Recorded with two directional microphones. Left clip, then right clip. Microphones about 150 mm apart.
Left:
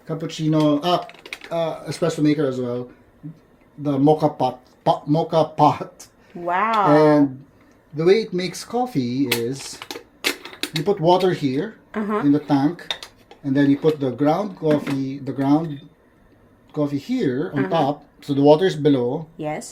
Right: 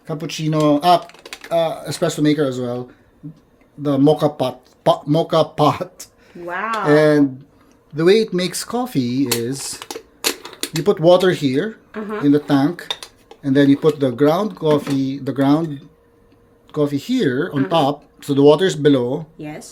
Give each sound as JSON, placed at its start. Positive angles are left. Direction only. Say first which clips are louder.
{"t": 0.1, "sound": "speech", "louder": "even", "side_deg": -90}
{"t": 1.5, "sound": "speech", "louder": "right 6 dB", "side_deg": -75}
{"t": 3.8, "sound": "speech", "louder": "right 2 dB", "side_deg": -55}
{"t": 6.5, "sound": "speech", "louder": "left 2 dB", "side_deg": 30}
{"t": 6.9, "sound": "speech", "louder": "right 5 dB", "side_deg": -45}
{"t": 9.9, "sound": "typewriter", "louder": "right 1 dB", "side_deg": -40}
{"t": 10.8, "sound": "speech", "louder": "right 5 dB", "side_deg": -65}
{"t": 11.9, "sound": "speech", "louder": "left 3 dB", "side_deg": 35}
{"t": 12.2, "sound": "speech", "louder": "right 4 dB", "side_deg": -55}
{"t": 16.7, "sound": "speech", "louder": "right 4 dB", "side_deg": -65}
{"t": 19.4, "sound": "speech", "louder": "left 5 dB", "side_deg": 30}